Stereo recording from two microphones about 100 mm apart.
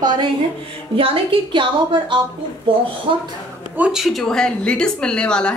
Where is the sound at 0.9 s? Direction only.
65° right (ahead or behind).